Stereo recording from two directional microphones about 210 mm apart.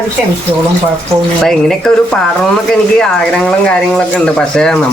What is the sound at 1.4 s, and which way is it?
Speech, centre (ahead or behind).